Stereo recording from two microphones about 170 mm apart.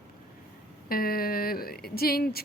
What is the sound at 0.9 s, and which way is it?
A woman's voice, 60° left (ahead or behind).